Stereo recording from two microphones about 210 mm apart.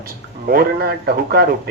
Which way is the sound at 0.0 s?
45° right (ahead or behind).